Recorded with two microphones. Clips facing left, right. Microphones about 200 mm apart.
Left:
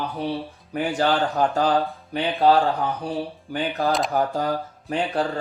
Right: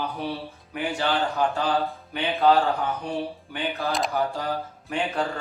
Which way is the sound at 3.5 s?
40° left (ahead or behind).